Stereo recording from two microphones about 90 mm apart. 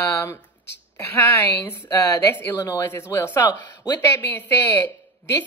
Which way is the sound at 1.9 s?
45° left (ahead or behind).